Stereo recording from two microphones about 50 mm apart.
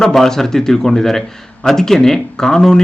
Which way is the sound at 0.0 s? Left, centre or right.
Centre.